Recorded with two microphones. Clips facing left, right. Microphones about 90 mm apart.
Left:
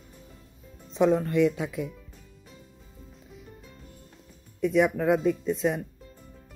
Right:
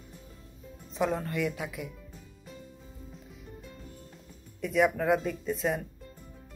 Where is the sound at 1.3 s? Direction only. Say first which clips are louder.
Left 8 dB; 20° left (ahead or behind).